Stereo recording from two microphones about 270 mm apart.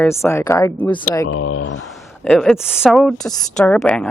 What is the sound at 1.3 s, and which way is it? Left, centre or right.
Speech, left.